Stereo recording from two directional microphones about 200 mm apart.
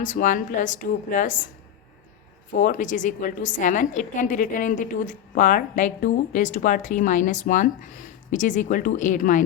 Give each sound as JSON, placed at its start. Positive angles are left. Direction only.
{"t": 0.0, "sound": "a woman's voice", "side_deg": 40}
{"t": 2.5, "sound": "a woman's voice", "side_deg": 40}